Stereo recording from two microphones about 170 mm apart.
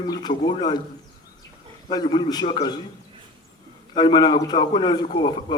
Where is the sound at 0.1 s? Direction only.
25° left (ahead or behind).